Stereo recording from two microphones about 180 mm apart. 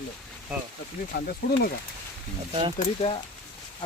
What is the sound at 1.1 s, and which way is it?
Speech, 60° left (ahead or behind).